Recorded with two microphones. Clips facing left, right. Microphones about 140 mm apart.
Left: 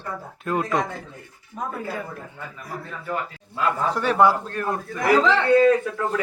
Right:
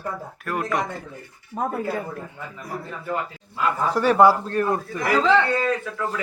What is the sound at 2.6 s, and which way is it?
Speech, 20° right (ahead or behind).